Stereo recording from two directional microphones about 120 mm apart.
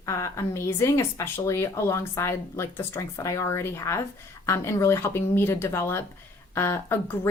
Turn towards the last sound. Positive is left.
turn(degrees=20)  # may be behind; listen again after turning